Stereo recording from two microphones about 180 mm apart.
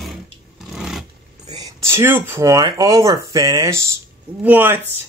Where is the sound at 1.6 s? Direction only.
15° right (ahead or behind).